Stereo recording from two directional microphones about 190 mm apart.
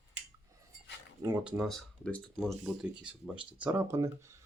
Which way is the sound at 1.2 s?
10° right (ahead or behind).